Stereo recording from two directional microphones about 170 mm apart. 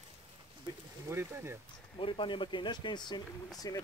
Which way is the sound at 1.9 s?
30° left (ahead or behind).